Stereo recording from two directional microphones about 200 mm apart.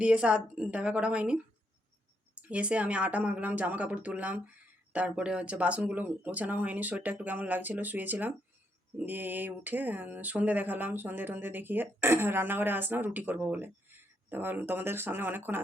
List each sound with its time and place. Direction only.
0.0 s a woman's voice: 5° right (ahead or behind)